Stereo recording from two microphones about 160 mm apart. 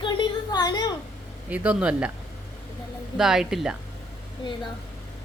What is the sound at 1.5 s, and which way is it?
Speech, 10° right (ahead or behind).